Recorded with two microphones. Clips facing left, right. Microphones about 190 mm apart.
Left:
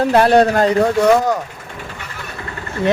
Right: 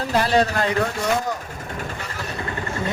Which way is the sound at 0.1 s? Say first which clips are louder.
Left 6 dB; 60° left (ahead or behind).